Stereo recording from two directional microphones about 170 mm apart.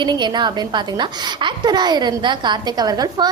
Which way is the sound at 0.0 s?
25° right (ahead or behind).